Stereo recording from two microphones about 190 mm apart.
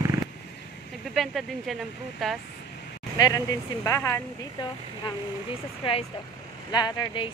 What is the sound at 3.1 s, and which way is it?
Speech, 20° left (ahead or behind).